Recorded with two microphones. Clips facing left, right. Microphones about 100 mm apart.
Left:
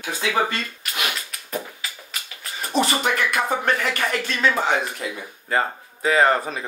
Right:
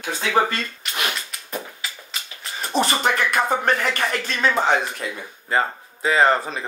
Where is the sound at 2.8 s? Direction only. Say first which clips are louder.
Right 1 dB; 30° right (ahead or behind).